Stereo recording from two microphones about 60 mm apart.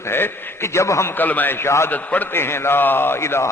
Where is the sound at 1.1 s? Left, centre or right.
Left.